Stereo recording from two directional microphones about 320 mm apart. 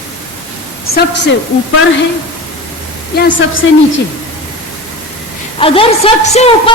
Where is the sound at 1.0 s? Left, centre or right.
Left.